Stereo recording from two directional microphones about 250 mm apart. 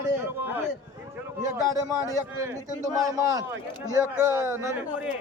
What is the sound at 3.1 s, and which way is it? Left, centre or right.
Speech, centre.